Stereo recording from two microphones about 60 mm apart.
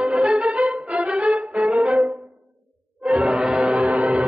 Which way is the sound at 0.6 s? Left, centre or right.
Centre.